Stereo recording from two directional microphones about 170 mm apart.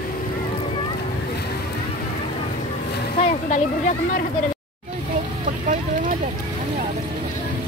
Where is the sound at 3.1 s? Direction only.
45° left (ahead or behind).